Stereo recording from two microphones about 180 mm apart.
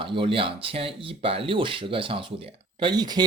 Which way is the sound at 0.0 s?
30° right (ahead or behind).